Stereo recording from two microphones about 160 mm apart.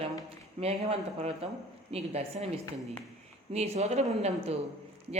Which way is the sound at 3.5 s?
45° right (ahead or behind).